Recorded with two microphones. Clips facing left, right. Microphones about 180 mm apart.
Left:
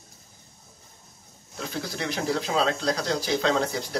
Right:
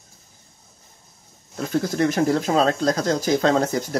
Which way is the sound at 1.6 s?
45° right (ahead or behind).